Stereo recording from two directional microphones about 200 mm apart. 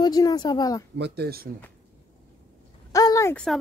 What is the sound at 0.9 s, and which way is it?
Speech, 55° right (ahead or behind).